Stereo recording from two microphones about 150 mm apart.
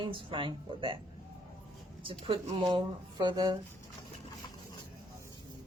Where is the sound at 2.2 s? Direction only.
35° right (ahead or behind).